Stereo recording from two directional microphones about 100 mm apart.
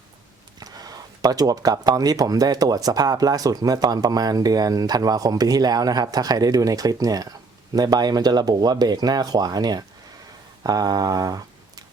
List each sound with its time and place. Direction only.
0.6 s speech: 40° right (ahead or behind)